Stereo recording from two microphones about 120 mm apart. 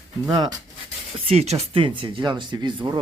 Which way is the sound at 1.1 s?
55° right (ahead or behind).